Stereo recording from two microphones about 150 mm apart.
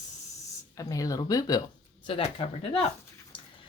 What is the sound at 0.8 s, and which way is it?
Speech, 25° left (ahead or behind).